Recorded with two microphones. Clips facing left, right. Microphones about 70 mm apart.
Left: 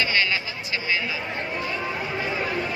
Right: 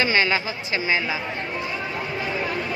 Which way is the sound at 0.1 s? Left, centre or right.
Right.